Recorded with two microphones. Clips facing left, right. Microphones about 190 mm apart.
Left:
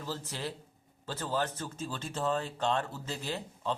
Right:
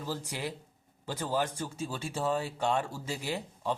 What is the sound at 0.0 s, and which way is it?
Speech, 15° right (ahead or behind).